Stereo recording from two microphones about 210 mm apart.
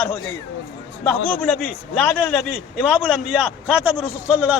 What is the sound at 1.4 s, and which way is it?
A man's voice, 5° left (ahead or behind).